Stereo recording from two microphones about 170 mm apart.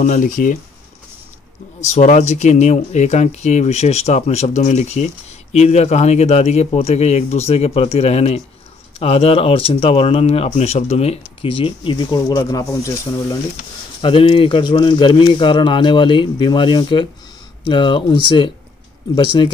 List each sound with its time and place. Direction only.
0.0 s speech: 50° left (ahead or behind)
1.8 s speech: 45° left (ahead or behind); by 13.4 s 20° left (ahead or behind)
14.0 s speech: 30° left (ahead or behind)